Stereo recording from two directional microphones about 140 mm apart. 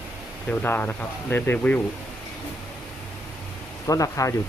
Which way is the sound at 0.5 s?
15° left (ahead or behind).